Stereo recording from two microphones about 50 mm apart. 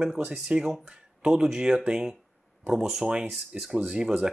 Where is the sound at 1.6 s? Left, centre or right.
Centre.